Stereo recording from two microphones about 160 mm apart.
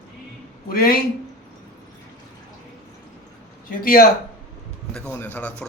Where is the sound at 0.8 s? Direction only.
70° left (ahead or behind).